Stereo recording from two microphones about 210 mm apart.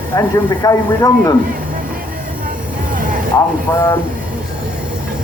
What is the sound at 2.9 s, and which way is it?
Music, 40° right (ahead or behind).